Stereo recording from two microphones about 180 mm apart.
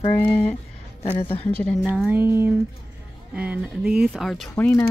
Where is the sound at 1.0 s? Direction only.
30° left (ahead or behind).